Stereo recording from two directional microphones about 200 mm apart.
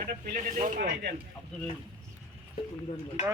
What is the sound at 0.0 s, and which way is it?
Speech, 45° right (ahead or behind).